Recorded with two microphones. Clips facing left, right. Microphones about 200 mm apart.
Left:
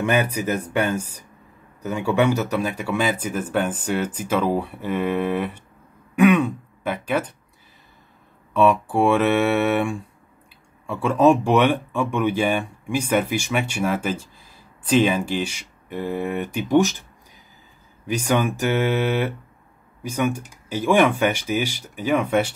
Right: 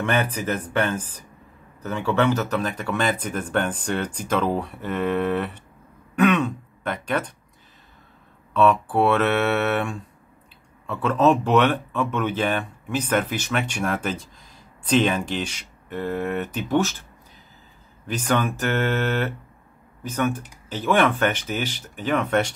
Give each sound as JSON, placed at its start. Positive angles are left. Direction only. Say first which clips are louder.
{"t": 0.0, "sound": "speech", "louder": "left 3 dB", "side_deg": 10}
{"t": 8.5, "sound": "speech", "louder": "left 1 dB", "side_deg": 10}
{"t": 18.0, "sound": "speech", "louder": "left 2 dB", "side_deg": 10}